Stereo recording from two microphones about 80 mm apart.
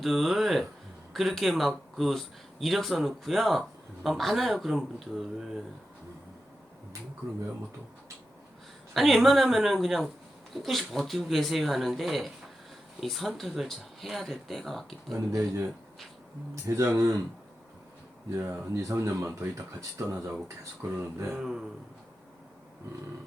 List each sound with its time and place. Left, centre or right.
0.0 s speech: centre
8.9 s speech: centre
16.6 s speech: right
18.3 s speech: right
21.3 s speech: centre